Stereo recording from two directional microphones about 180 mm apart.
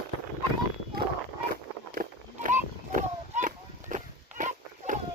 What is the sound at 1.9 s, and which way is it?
Walk, 50° right (ahead or behind).